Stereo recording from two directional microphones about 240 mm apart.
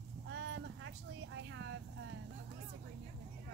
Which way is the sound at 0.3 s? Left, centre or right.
Right.